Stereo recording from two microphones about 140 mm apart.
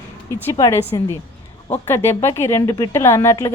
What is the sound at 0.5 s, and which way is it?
Speech, 25° left (ahead or behind).